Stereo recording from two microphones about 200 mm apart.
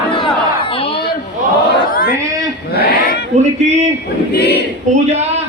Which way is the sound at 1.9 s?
45° left (ahead or behind).